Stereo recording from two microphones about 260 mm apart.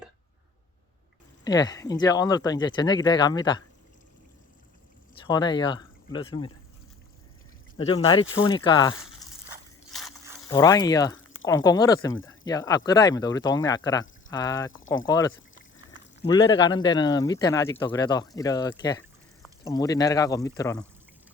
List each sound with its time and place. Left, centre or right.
1.5 s speech: centre
5.2 s speech: centre
7.8 s speech: centre
10.5 s speech: centre